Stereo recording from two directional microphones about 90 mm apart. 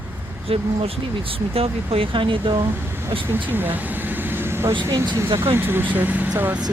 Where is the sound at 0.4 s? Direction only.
90° right; by 2.6 s 65° right (ahead or behind).